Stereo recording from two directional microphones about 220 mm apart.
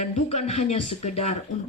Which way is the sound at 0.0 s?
30° left (ahead or behind).